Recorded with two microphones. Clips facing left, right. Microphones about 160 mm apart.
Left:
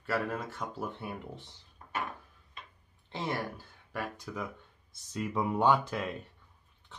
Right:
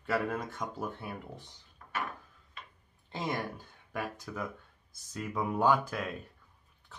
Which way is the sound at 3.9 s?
5° right (ahead or behind).